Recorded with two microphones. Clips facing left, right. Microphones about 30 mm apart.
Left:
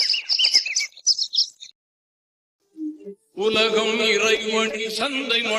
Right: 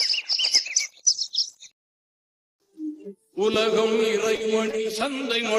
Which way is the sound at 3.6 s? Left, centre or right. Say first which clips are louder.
Left 1 dB; left.